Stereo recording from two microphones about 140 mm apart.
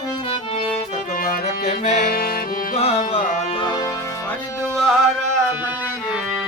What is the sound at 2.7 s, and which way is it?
Music, 50° left (ahead or behind).